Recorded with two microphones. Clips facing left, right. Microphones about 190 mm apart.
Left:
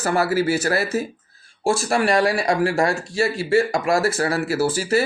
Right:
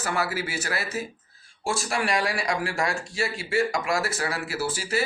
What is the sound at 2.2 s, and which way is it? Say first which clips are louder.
Speech: left 8 dB; 40° left (ahead or behind).